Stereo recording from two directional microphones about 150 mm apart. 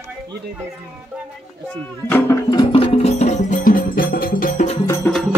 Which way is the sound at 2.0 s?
15° left (ahead or behind).